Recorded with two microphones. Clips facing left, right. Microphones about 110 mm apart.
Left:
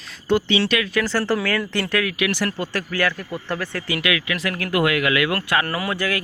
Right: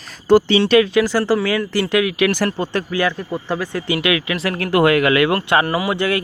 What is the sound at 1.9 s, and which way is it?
Speech, 20° right (ahead or behind).